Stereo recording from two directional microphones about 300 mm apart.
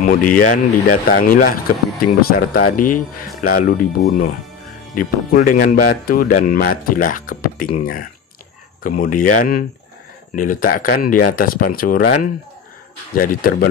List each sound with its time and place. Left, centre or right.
0.0 s speech: left